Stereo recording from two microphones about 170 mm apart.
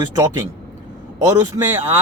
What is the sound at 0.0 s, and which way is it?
Speech, 25° right (ahead or behind).